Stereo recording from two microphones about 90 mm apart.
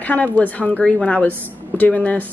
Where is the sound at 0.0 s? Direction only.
15° left (ahead or behind).